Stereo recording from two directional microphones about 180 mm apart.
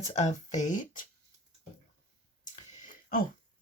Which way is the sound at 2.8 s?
50° left (ahead or behind).